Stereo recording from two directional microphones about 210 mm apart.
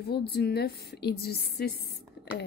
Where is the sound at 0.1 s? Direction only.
50° left (ahead or behind).